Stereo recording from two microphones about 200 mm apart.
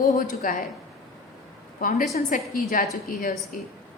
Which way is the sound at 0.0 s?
45° left (ahead or behind).